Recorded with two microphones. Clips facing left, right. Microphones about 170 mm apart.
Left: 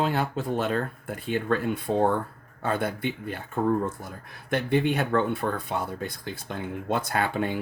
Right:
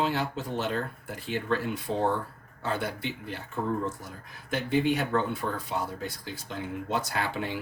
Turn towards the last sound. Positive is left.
turn(degrees=50)  # may be behind; listen again after turning